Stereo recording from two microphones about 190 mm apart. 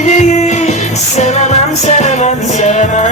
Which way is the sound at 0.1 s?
40° left (ahead or behind).